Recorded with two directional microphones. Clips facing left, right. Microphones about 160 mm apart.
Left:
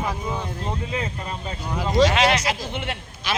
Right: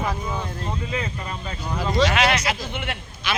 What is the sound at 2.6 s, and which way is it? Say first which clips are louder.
Speech: left 1 dB; 30° left (ahead or behind).